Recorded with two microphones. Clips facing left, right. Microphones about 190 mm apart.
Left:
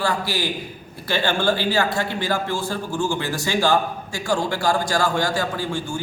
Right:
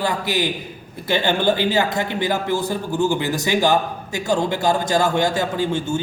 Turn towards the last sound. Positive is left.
turn(degrees=-20)  # may be behind; listen again after turning